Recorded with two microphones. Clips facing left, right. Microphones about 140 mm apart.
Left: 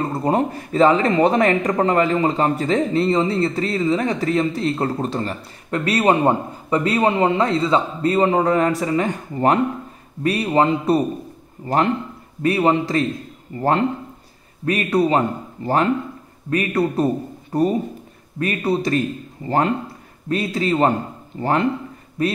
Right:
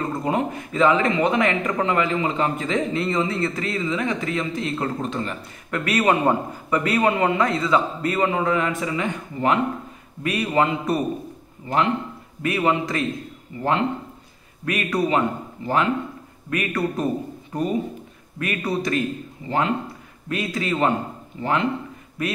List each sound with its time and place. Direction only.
0.1 s speech: 35° left (ahead or behind)
13.6 s speech: 45° left (ahead or behind)
14.6 s speech: 30° left (ahead or behind)
20.2 s speech: 30° left (ahead or behind)
21.4 s speech: 40° left (ahead or behind)
22.2 s speech: 30° left (ahead or behind)